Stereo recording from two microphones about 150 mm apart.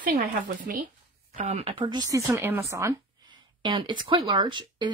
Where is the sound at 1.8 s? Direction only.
25° right (ahead or behind).